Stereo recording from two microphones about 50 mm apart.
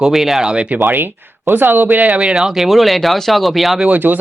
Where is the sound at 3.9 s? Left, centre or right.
Right.